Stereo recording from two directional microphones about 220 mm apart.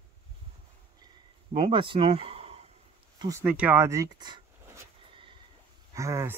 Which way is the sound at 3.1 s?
15° right (ahead or behind).